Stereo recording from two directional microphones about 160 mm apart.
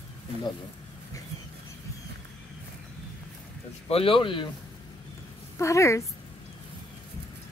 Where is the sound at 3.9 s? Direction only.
35° left (ahead or behind).